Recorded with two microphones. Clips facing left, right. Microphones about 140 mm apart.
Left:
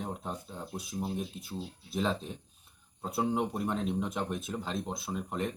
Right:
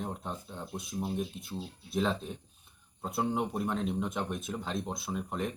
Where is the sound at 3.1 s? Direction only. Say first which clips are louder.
Left 1 dB; centre (ahead or behind).